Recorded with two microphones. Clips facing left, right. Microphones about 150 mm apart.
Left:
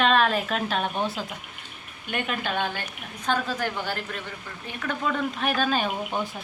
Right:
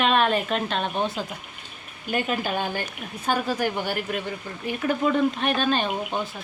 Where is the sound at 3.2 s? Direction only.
10° right (ahead or behind).